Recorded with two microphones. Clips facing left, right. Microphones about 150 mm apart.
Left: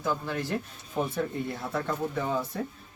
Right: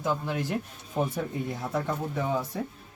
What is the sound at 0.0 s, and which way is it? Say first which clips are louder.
Speech: right 1 dB; 15° right (ahead or behind).